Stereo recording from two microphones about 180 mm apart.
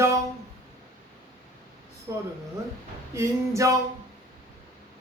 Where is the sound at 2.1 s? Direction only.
15° right (ahead or behind).